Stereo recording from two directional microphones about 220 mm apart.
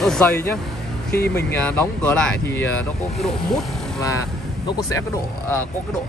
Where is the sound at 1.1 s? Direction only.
45° left (ahead or behind).